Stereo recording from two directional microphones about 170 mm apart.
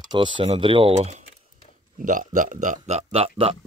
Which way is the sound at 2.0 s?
50° right (ahead or behind).